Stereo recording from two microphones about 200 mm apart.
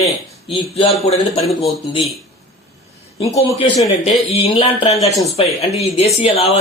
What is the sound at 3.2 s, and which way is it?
A man's voice, 30° left (ahead or behind).